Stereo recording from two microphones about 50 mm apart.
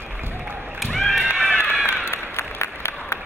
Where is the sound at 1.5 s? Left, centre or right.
Left.